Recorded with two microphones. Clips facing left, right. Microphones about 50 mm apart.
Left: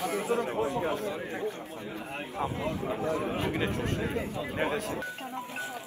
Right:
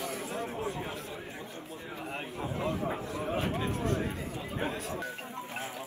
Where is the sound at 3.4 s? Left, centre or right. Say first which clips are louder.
Left 1 dB; left.